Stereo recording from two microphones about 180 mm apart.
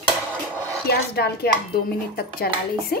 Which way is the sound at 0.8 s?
60° left (ahead or behind).